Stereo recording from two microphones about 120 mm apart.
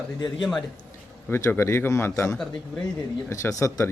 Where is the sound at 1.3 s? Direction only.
20° left (ahead or behind).